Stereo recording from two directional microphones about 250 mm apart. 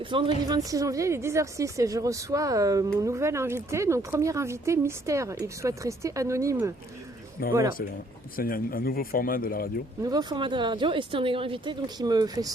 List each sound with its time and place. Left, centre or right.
0.0 s a woman's voice: centre
7.4 s speech: left
10.0 s a woman's voice: centre